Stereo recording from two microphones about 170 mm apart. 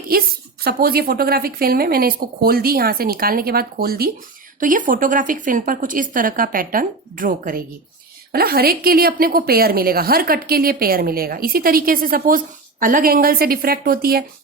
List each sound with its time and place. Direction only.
0.1 s a woman's voice: 65° right (ahead or behind)
4.6 s a woman's voice: 50° right (ahead or behind)